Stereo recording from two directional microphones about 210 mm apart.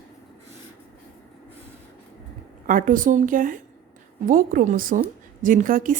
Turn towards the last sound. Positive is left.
turn(degrees=-40)  # may be behind; listen again after turning